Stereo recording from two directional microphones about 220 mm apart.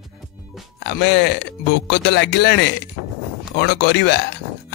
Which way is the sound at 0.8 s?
50° left (ahead or behind).